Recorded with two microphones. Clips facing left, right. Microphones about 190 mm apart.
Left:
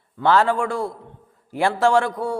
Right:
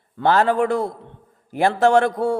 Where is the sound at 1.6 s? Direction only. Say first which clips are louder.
Right 2 dB; 45° right (ahead or behind).